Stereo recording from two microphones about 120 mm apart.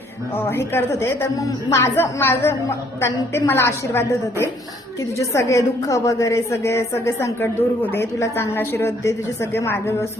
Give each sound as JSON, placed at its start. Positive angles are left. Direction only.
{"t": 0.3, "sound": "a woman's voice", "side_deg": 20}